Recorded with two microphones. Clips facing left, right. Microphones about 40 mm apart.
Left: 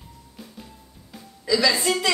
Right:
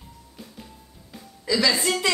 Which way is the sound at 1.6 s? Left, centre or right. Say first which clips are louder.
Even; centre.